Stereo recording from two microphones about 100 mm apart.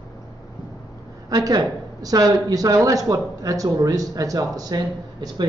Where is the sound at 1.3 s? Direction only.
40° right (ahead or behind).